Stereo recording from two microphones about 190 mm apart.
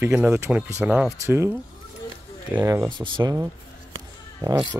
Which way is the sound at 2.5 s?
10° right (ahead or behind).